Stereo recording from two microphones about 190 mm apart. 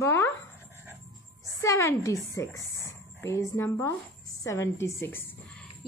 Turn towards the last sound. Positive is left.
turn(degrees=10)  # may be behind; listen again after turning